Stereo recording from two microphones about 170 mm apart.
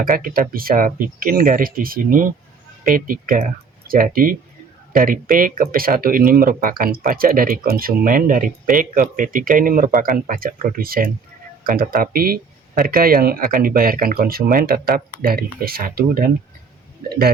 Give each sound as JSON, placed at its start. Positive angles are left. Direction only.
{"t": 0.0, "sound": "speech", "side_deg": -55}